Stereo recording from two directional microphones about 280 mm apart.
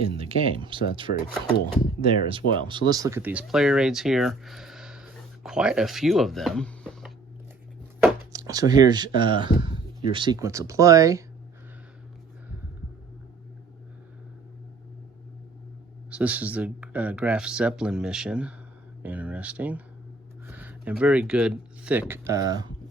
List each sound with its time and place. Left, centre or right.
0.1 s speech: centre
1.1 s speech: left
2.0 s speech: centre
8.0 s speech: centre
16.0 s speech: centre